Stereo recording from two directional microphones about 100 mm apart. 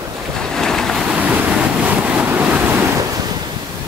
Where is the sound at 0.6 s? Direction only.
5° left (ahead or behind).